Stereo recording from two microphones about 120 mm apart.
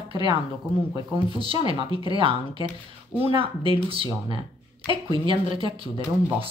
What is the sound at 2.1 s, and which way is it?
Speech, 45° right (ahead or behind).